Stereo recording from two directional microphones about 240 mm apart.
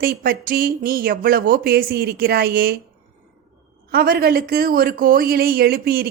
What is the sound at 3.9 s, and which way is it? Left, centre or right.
A woman's voice, right.